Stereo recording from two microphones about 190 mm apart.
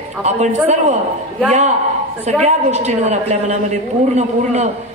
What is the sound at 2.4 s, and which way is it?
A woman's voice, 35° right (ahead or behind).